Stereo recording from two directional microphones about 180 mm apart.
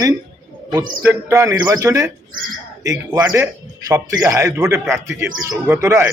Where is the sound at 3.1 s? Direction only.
20° right (ahead or behind).